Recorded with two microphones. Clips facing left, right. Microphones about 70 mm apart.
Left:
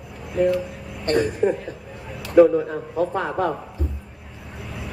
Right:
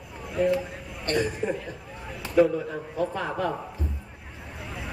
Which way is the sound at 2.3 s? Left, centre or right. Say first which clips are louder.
Left 7 dB; left.